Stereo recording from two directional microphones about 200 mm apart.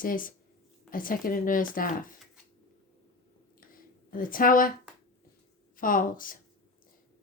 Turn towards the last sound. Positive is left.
turn(degrees=45)  # may be behind; listen again after turning